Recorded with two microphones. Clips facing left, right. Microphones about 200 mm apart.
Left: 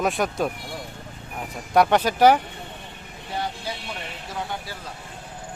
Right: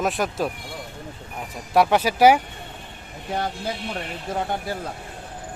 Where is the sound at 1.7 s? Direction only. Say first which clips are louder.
Even; 5° right (ahead or behind).